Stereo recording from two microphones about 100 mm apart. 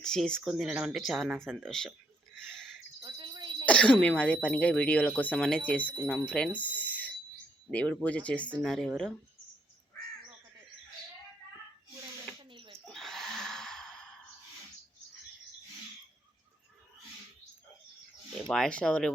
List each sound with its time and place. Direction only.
0.0 s speech: 5° left (ahead or behind)
0.4 s speech: 5° right (ahead or behind)
3.0 s a sound: 50° right (ahead or behind)
3.7 s speech: 10° left (ahead or behind)
6.6 s a sound: 15° left (ahead or behind)
7.7 s speech: 15° left (ahead or behind)
12.4 s a sound: 55° right (ahead or behind)
12.8 s gasp: 5° left (ahead or behind)
18.4 s speech: 5° left (ahead or behind)